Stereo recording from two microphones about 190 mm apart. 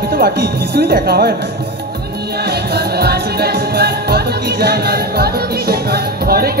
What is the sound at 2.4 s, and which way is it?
Music, 55° right (ahead or behind).